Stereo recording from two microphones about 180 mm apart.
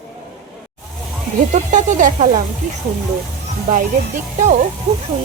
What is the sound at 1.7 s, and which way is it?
Speech, 45° right (ahead or behind).